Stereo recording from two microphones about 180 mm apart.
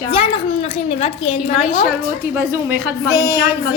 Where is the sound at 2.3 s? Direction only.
10° right (ahead or behind).